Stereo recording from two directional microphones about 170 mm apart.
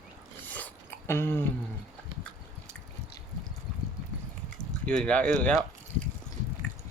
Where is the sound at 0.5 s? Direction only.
10° left (ahead or behind).